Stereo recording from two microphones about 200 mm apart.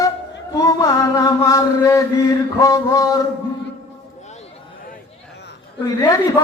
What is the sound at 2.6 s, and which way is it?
Speech, 15° left (ahead or behind).